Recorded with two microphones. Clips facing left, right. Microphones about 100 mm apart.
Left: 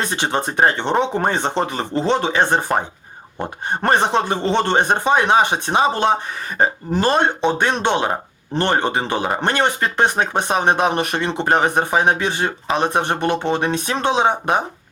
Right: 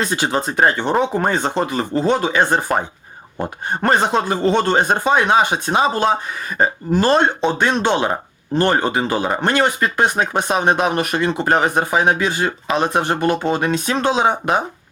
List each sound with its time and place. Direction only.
0.0 s speech: 25° left (ahead or behind)